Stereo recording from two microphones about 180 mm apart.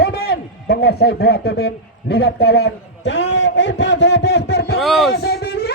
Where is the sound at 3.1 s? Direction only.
75° left (ahead or behind).